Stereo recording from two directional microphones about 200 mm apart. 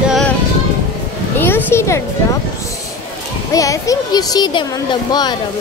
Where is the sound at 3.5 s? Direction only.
15° left (ahead or behind).